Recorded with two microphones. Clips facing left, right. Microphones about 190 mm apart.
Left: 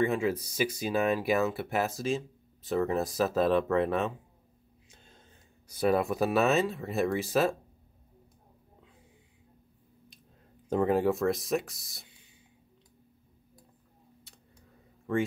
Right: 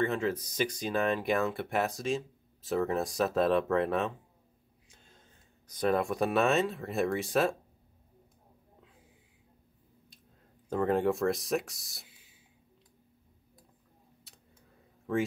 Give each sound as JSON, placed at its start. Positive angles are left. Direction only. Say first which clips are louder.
{"t": 0.0, "sound": "speech", "louder": "left 2 dB", "side_deg": 10}
{"t": 5.7, "sound": "speech", "louder": "left 2 dB", "side_deg": 5}
{"t": 10.7, "sound": "speech", "louder": "left 2 dB", "side_deg": 10}
{"t": 14.3, "sound": "a sound", "louder": "left 2 dB", "side_deg": 0}
{"t": 15.1, "sound": "speech", "louder": "left 1 dB", "side_deg": 0}